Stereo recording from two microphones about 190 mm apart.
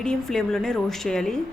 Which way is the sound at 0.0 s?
5° left (ahead or behind).